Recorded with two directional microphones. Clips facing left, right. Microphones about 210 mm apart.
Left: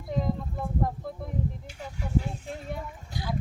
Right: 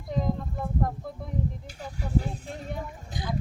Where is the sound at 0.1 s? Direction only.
Centre (ahead or behind).